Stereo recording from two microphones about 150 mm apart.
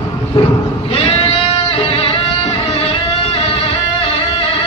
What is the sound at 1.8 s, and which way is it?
Music, 35° left (ahead or behind).